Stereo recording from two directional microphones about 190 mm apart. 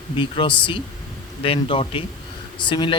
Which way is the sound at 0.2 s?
25° left (ahead or behind).